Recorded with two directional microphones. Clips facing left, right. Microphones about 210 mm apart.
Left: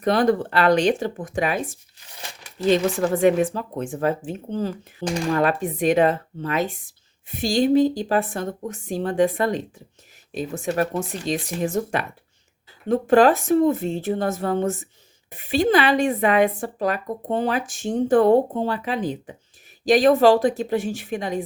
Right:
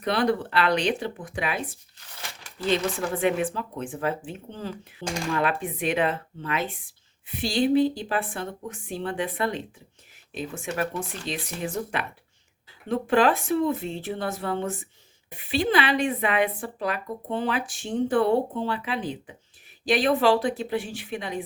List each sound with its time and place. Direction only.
0.0 s speech: 45° left (ahead or behind)
3.2 s speech: 40° left (ahead or behind)